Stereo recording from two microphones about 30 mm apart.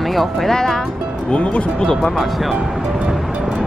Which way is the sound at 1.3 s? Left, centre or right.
Left.